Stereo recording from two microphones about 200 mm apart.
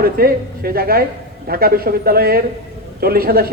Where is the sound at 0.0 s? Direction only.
50° right (ahead or behind).